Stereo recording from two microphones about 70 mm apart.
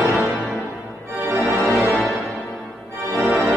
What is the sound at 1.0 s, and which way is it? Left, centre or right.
Organ, right.